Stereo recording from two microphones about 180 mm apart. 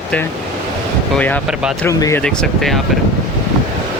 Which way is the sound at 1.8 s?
15° left (ahead or behind).